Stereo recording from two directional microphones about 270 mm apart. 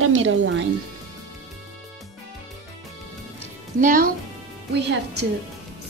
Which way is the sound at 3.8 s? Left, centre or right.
Right.